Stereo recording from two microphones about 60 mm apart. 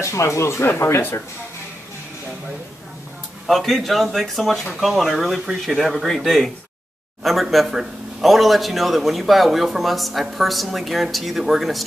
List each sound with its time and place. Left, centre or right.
0.0 s speech: left
3.4 s a man's voice: centre